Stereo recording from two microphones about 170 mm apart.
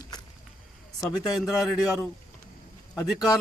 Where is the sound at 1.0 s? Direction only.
20° left (ahead or behind).